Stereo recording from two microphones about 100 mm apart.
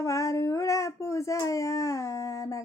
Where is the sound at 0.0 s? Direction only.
30° left (ahead or behind).